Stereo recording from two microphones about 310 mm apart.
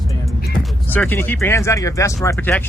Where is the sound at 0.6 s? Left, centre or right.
Centre.